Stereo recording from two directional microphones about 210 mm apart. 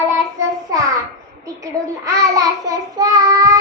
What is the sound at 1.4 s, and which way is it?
A child's voice, 15° right (ahead or behind).